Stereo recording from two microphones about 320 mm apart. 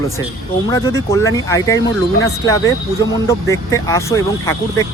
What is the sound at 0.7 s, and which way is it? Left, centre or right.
Speech, centre.